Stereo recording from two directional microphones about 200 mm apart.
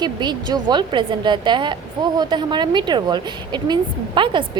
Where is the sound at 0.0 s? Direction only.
20° right (ahead or behind).